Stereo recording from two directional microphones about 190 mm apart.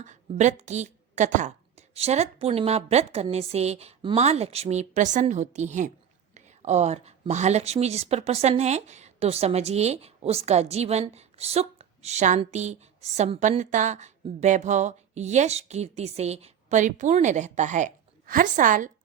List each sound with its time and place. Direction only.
0.0 s a woman's voice: 40° right (ahead or behind)